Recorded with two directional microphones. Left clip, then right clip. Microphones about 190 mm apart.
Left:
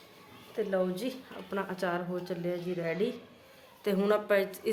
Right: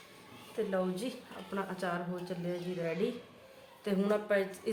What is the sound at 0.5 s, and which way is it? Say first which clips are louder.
A woman's voice: left 3 dB; 50° left (ahead or behind).